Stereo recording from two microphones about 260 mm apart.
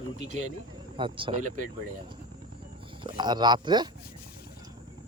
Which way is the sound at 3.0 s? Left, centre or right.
Centre.